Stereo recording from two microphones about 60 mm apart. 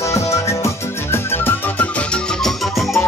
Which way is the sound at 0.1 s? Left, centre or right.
Left.